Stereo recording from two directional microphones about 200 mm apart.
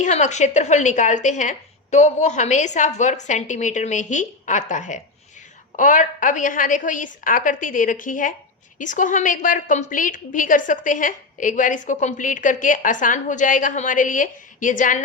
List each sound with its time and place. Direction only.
0.0 s a woman's voice: 35° left (ahead or behind)